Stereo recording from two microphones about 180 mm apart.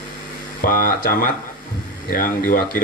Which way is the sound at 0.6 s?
50° left (ahead or behind).